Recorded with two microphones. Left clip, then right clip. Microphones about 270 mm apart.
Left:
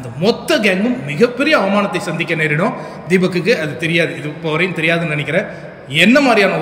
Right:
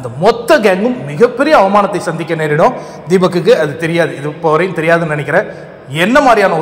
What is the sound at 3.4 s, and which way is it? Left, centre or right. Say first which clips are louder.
Speech: right 6 dB; centre.